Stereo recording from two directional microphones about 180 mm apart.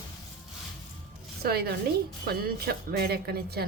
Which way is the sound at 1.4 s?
60° right (ahead or behind).